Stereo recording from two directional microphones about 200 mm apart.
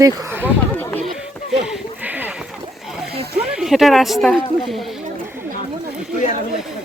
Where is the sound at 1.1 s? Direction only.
5° right (ahead or behind).